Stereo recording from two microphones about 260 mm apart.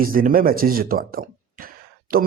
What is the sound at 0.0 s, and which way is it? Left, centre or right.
Speech, right.